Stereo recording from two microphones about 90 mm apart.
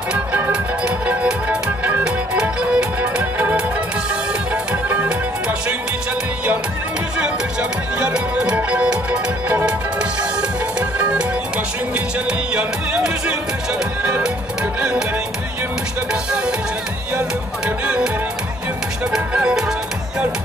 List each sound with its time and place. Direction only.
0.1 s music: 15° right (ahead or behind)
4.8 s music: 15° right (ahead or behind)
8.0 s music: 10° right (ahead or behind)
10.8 s music: 15° right (ahead or behind)
12.3 s music: 10° right (ahead or behind)
16.1 s music: 10° right (ahead or behind)
19.1 s music: 10° right (ahead or behind)